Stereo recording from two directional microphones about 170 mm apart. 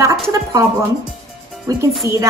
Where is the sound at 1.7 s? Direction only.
20° right (ahead or behind).